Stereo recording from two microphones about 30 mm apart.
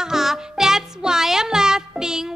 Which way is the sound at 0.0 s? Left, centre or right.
Centre.